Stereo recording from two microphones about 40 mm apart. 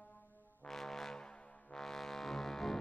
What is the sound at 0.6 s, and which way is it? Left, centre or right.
Music, centre.